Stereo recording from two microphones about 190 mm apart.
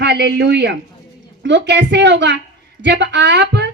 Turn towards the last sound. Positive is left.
turn(degrees=-65)  # may be behind; listen again after turning